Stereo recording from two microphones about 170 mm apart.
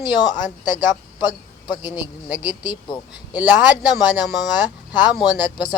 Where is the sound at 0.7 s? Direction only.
25° left (ahead or behind).